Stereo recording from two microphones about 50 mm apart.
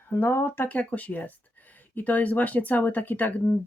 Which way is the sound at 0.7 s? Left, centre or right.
Left.